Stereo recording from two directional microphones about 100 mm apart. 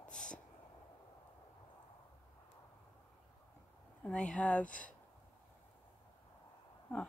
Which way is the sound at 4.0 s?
10° left (ahead or behind).